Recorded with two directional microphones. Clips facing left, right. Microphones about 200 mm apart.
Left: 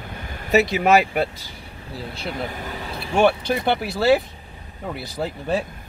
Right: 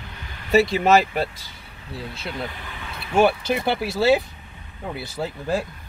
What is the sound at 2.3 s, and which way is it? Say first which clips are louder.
Speech: left 3 dB; 45° left (ahead or behind).